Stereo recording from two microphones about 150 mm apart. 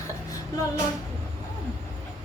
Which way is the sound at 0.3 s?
25° left (ahead or behind).